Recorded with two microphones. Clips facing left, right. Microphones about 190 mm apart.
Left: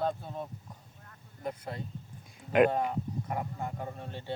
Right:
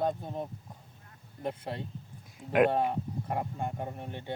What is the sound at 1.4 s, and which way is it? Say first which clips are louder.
Speech: right 2 dB; 30° right (ahead or behind).